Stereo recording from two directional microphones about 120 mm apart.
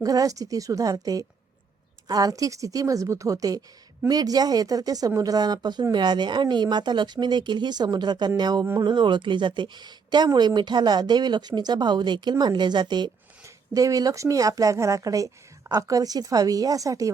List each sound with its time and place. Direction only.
0.0 s a woman's voice: 30° right (ahead or behind)